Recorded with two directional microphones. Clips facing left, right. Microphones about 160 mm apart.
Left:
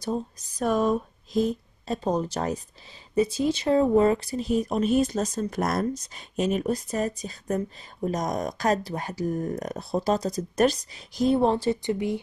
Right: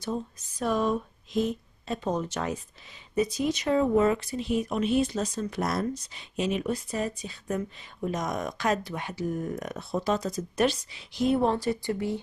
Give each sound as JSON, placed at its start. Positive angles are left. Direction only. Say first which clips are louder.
{"t": 0.0, "sound": "speech", "louder": "left 3 dB", "side_deg": 35}